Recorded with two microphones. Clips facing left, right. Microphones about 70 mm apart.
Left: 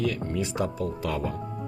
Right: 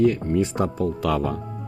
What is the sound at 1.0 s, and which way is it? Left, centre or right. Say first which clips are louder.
Speech: right 7 dB; right.